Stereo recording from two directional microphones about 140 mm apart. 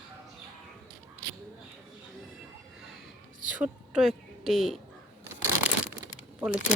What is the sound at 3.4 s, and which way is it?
A woman's voice, 10° right (ahead or behind).